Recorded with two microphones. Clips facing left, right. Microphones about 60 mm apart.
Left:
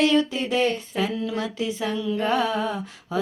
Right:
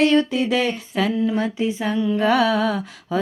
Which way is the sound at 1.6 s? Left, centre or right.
Right.